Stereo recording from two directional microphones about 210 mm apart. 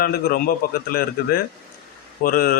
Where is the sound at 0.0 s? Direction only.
45° left (ahead or behind).